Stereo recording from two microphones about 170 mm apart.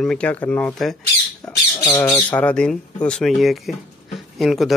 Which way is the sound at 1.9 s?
20° left (ahead or behind).